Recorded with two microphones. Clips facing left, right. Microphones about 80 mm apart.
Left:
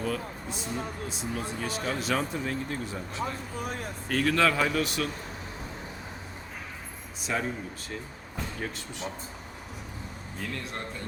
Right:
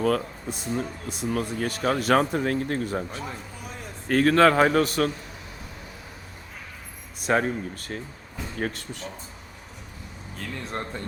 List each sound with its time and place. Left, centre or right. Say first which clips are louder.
0.0 s speech: right 8 dB; right
7.2 s speech: right 8 dB; right
10.7 s speech: right 5 dB; right